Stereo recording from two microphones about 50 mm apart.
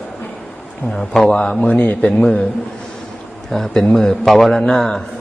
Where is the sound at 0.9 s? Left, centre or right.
Centre.